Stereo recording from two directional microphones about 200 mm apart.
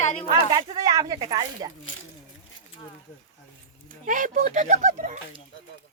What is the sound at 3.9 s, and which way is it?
Speech, 40° right (ahead or behind).